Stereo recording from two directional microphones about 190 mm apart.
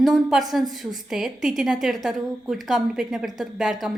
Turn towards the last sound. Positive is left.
turn(degrees=0)  # may be behind; listen again after turning